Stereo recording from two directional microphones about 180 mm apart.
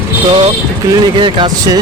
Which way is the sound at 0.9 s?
25° right (ahead or behind).